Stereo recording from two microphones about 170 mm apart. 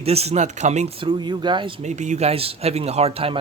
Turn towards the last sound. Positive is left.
turn(degrees=-35)  # may be behind; listen again after turning